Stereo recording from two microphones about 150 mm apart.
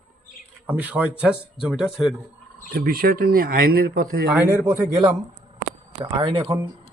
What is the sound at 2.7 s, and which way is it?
Speech, 75° right (ahead or behind).